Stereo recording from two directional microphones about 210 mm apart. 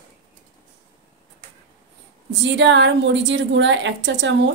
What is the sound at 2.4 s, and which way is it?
A woman's voice, 60° right (ahead or behind).